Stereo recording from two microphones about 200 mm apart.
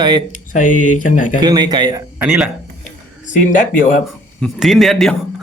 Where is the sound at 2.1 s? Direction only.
10° right (ahead or behind).